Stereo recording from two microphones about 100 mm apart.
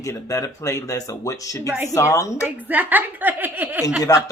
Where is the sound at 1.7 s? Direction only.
25° right (ahead or behind).